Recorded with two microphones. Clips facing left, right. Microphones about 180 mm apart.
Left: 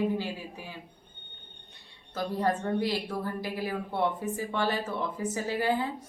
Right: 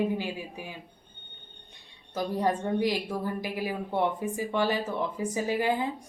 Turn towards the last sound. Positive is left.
turn(degrees=-15)  # may be behind; listen again after turning